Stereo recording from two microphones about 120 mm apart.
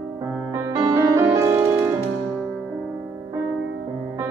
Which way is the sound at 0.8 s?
30° right (ahead or behind).